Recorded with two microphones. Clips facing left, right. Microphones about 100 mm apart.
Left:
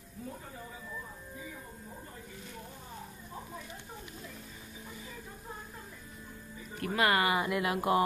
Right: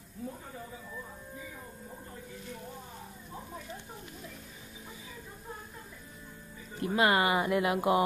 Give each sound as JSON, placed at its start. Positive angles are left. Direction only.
{"t": 6.8, "sound": "speech", "side_deg": -25}